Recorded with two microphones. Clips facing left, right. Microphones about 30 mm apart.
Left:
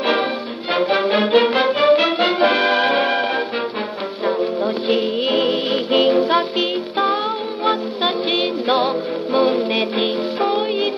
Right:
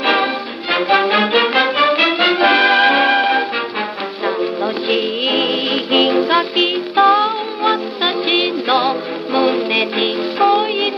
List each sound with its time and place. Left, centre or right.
0.0 s music: right
4.4 s music: centre